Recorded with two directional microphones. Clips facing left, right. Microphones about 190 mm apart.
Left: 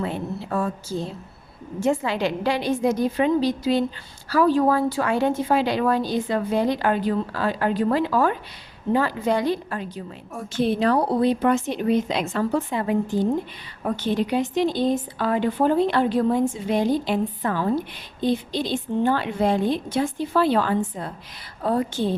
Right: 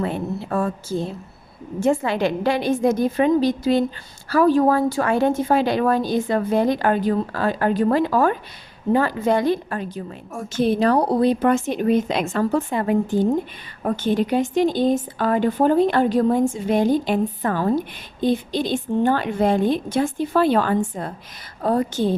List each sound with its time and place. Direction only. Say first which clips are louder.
0.0 s a woman's voice: right 3 dB; 55° right (ahead or behind)